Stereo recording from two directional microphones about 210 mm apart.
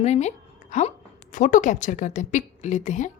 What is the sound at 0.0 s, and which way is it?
A woman's voice, 30° left (ahead or behind).